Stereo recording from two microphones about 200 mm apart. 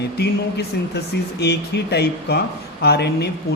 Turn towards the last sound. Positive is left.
turn(degrees=55)  # may be behind; listen again after turning